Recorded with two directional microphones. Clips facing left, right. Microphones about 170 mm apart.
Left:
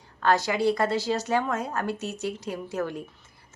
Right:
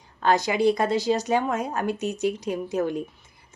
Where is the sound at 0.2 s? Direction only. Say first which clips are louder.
Right 2 dB; 15° right (ahead or behind).